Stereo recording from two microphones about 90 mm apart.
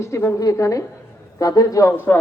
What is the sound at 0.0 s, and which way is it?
Speech, 30° left (ahead or behind).